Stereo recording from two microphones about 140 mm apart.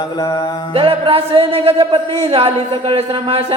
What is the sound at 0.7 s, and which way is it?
Speech, 40° right (ahead or behind).